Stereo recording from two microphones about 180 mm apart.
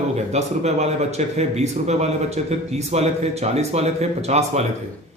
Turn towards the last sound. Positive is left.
turn(degrees=-35)  # may be behind; listen again after turning